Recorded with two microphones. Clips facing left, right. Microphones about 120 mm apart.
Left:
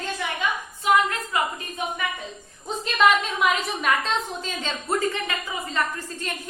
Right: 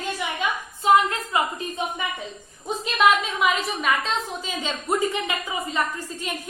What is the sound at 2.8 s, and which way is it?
A woman's voice, 5° right (ahead or behind).